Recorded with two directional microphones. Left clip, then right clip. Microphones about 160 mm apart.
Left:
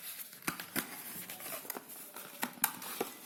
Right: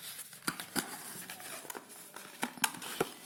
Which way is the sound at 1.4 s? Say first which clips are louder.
Even; centre (ahead or behind).